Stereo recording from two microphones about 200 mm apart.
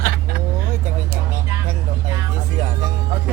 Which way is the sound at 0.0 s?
45° right (ahead or behind).